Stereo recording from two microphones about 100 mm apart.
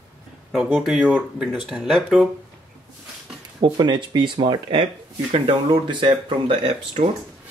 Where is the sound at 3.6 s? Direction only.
50° right (ahead or behind).